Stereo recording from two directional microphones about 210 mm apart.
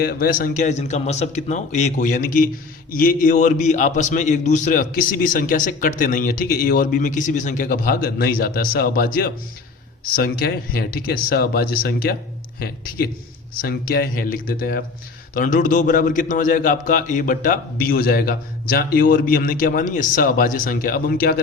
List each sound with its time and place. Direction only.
0.0 s a man's voice: 45° left (ahead or behind)